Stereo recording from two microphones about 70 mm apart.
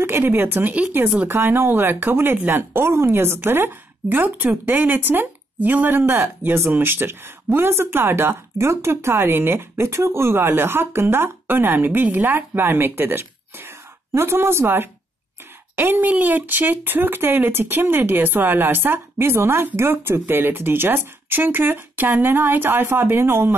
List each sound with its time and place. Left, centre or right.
0.0 s speech: right